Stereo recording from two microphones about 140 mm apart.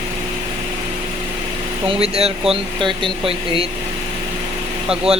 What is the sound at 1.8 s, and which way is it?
Speech, 45° right (ahead or behind).